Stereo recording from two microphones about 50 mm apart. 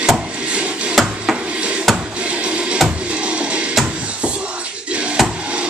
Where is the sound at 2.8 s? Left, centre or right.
Right.